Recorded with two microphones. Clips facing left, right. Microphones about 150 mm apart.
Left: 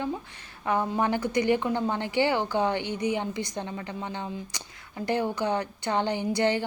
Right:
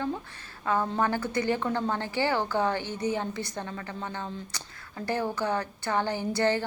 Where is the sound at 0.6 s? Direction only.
20° left (ahead or behind).